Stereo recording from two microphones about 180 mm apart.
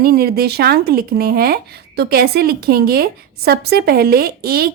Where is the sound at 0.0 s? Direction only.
55° right (ahead or behind).